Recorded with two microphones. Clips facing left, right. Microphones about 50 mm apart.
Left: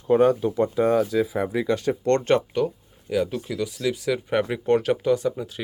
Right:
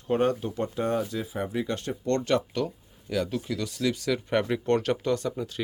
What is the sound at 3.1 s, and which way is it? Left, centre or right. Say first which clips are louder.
Speech: left 4 dB; centre.